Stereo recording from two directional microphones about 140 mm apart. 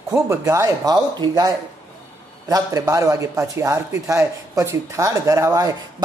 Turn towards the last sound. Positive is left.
turn(degrees=-25)  # may be behind; listen again after turning